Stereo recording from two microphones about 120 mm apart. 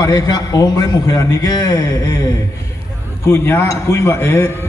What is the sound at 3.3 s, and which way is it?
A man's voice, 25° left (ahead or behind).